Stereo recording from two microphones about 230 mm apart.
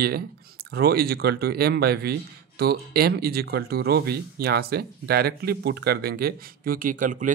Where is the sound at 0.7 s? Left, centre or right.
Right.